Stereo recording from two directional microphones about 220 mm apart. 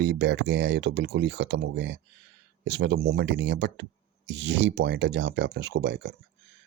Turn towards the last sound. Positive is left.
turn(degrees=-50)  # may be behind; listen again after turning